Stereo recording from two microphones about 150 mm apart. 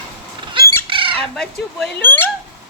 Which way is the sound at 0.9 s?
35° right (ahead or behind).